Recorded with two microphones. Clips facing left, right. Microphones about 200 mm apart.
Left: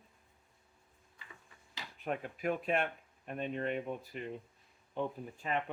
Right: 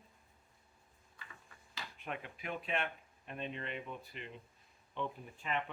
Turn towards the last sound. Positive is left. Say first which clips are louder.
# left 3 dB
turn(degrees=40)  # may be behind; listen again after turning